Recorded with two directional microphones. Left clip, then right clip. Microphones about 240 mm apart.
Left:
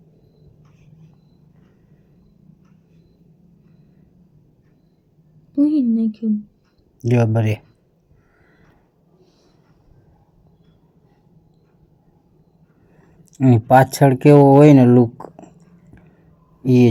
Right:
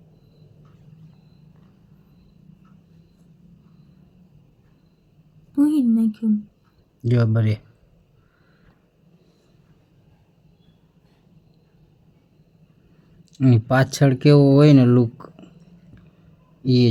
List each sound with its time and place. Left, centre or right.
5.5 s a woman's voice: right
7.0 s speech: centre
13.3 s speech: centre